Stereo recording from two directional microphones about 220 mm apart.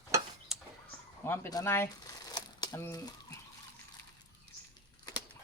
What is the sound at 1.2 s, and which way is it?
Speech, 15° left (ahead or behind).